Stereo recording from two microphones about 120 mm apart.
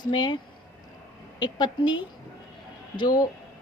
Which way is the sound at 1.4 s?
35° left (ahead or behind).